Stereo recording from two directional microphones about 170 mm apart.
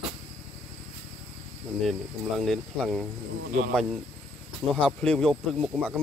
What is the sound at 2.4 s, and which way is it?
Speech, centre (ahead or behind).